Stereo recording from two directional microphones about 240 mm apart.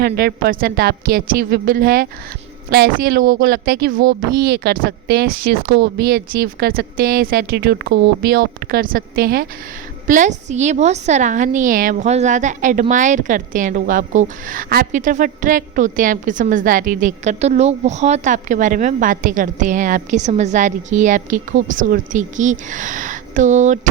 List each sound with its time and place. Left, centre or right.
0.0 s speech: right